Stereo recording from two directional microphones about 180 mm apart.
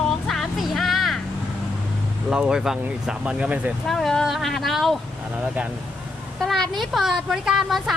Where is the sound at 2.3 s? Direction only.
5° right (ahead or behind).